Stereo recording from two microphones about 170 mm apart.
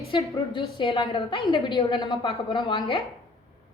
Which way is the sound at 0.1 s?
30° left (ahead or behind).